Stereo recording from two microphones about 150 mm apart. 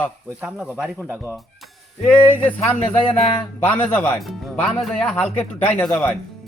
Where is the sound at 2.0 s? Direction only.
5° left (ahead or behind).